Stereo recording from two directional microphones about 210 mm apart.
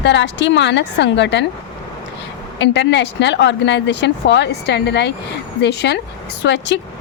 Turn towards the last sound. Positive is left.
turn(degrees=55)  # may be behind; listen again after turning